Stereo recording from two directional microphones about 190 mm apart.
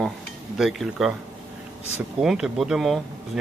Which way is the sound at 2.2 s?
Centre (ahead or behind).